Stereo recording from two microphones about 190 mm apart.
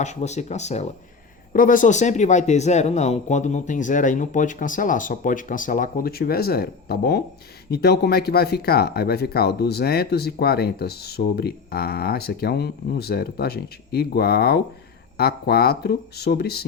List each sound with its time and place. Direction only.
0.0 s speech: 40° left (ahead or behind); by 16.6 s 55° left (ahead or behind)